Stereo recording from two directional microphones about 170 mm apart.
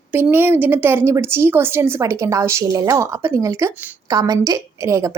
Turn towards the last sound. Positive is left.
turn(degrees=-20)  # may be behind; listen again after turning